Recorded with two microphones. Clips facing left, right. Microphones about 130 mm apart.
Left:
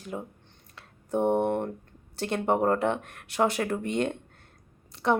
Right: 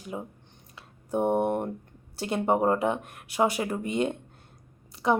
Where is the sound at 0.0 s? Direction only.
5° right (ahead or behind).